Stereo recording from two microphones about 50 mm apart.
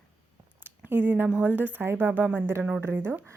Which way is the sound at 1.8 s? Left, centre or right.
Right.